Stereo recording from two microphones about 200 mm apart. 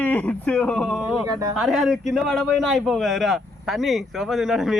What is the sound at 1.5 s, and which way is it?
Speech, centre (ahead or behind).